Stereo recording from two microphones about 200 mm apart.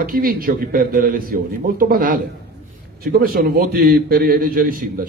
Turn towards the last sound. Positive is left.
turn(degrees=-45)  # may be behind; listen again after turning